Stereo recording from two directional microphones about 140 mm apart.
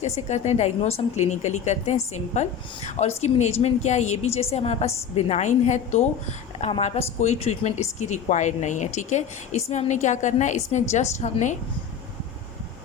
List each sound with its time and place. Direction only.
0.0 s a woman's voice: 55° left (ahead or behind)